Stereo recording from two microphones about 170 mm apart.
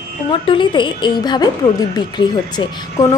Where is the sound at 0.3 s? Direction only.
30° left (ahead or behind).